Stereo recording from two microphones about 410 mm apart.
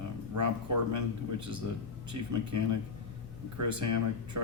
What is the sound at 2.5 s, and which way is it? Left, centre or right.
Speech, right.